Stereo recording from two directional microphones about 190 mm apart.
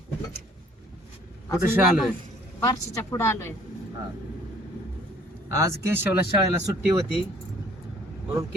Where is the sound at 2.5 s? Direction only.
15° left (ahead or behind).